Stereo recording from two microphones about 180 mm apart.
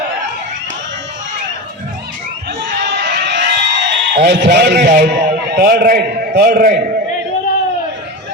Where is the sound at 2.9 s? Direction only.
65° right (ahead or behind).